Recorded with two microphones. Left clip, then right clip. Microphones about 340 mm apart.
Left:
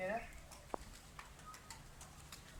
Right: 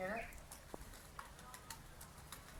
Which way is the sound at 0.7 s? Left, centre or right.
Left.